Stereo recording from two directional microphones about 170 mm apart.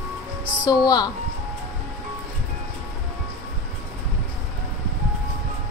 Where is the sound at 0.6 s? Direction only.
25° left (ahead or behind).